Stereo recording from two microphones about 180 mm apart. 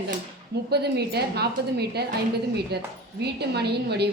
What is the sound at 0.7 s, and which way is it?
A woman's voice, 65° right (ahead or behind).